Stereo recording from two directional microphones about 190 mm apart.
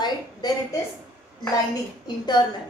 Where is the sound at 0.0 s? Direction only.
20° left (ahead or behind).